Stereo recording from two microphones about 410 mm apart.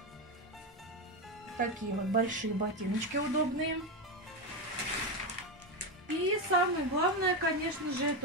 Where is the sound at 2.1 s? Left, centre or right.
Centre.